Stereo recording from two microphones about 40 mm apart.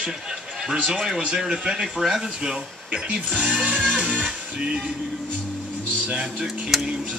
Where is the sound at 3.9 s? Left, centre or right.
Right.